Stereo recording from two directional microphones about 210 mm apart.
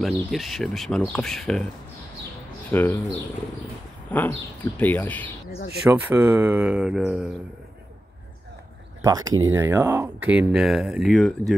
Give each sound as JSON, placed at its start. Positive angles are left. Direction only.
{"t": 0.0, "sound": "speech", "side_deg": 0}
{"t": 2.7, "sound": "speech", "side_deg": 10}
{"t": 4.1, "sound": "speech", "side_deg": 5}
{"t": 5.9, "sound": "speech", "side_deg": -10}
{"t": 9.0, "sound": "speech", "side_deg": -15}